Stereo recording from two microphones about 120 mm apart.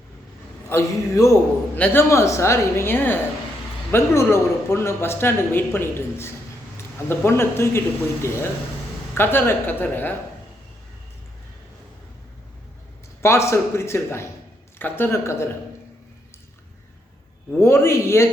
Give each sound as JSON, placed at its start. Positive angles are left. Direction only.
{"t": 0.7, "sound": "a man's voice", "side_deg": 25}
{"t": 9.1, "sound": "a woman's voice", "side_deg": 20}
{"t": 13.2, "sound": "a man's voice", "side_deg": 25}
{"t": 17.6, "sound": "a man's voice", "side_deg": 20}